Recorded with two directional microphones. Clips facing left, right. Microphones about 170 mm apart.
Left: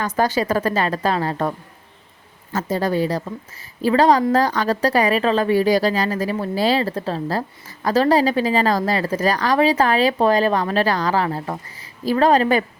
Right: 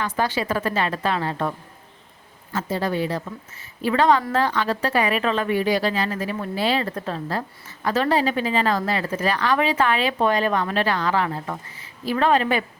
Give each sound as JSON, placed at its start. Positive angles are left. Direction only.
{"t": 0.0, "sound": "speech", "side_deg": 40}